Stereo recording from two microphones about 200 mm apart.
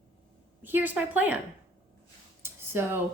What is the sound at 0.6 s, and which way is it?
Speech, 10° right (ahead or behind).